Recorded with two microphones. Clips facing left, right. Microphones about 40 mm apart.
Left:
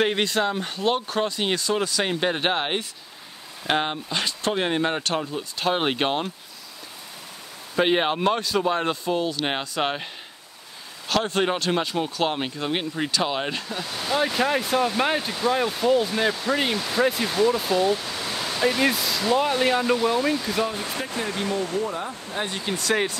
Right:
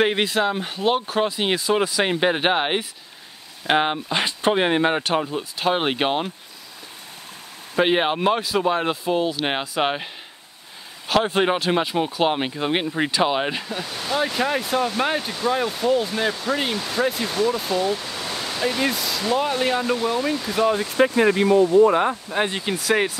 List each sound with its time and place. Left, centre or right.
0.0 s speech: centre
7.7 s speech: centre
11.1 s speech: centre
21.2 s speech: right
21.7 s speech: right
22.4 s speech: right
22.8 s speech: centre